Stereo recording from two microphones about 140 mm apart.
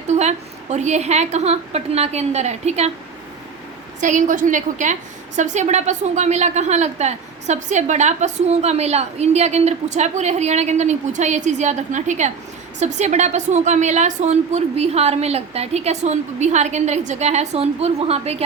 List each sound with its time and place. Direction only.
0.2 s a woman's voice: 55° right (ahead or behind)
4.0 s a woman's voice: 65° right (ahead or behind); by 18.4 s 45° right (ahead or behind)